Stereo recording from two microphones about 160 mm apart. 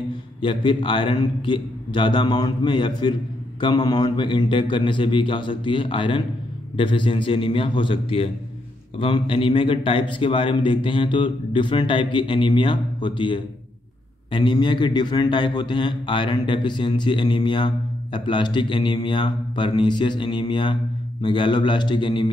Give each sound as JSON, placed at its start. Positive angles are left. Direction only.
{"t": 0.4, "sound": "a man's voice", "side_deg": 30}